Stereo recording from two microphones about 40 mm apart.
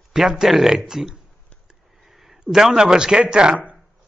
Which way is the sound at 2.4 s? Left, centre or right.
Centre.